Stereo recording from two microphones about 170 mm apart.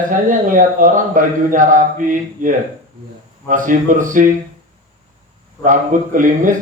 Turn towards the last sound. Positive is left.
turn(degrees=-50)  # may be behind; listen again after turning